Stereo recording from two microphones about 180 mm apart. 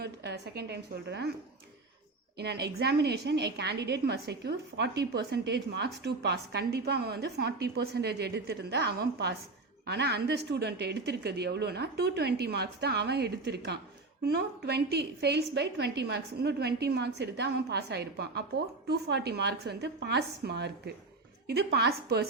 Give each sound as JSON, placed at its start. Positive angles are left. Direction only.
{"t": 0.0, "sound": "a woman's voice", "side_deg": -65}
{"t": 2.4, "sound": "a woman's voice", "side_deg": -65}